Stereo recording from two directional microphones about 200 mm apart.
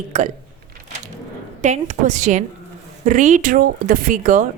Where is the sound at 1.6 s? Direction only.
35° right (ahead or behind).